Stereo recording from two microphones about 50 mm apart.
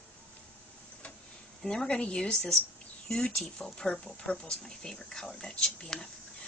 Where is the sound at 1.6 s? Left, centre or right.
Centre.